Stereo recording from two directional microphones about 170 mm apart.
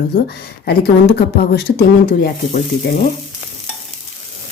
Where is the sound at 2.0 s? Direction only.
55° left (ahead or behind).